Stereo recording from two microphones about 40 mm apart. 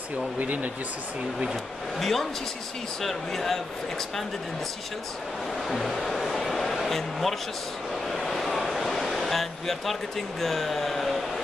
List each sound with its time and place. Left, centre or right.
0.4 s speech: right
2.0 s speech: centre
5.7 s a sound: centre
10.4 s speech: centre